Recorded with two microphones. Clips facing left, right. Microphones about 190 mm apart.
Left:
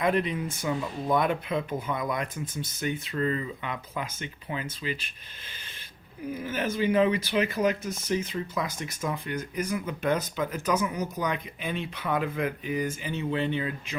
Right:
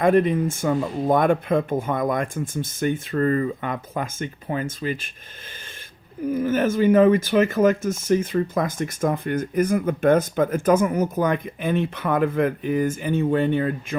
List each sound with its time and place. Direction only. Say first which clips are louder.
0.0 s speech: right 8 dB; 50° right (ahead or behind)
6.3 s speech: right 10 dB; 50° right (ahead or behind)